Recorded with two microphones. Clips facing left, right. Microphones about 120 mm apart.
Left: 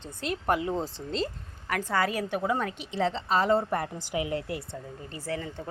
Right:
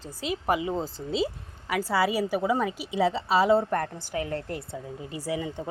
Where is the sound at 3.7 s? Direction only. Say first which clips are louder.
Right 2 dB; 10° left (ahead or behind).